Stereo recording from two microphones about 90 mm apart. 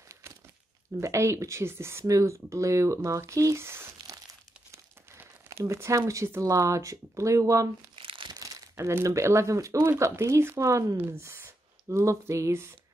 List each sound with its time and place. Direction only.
1.0 s speech: 35° right (ahead or behind)
8.0 s crumpling: 75° right (ahead or behind)
8.3 s speech: 40° right (ahead or behind)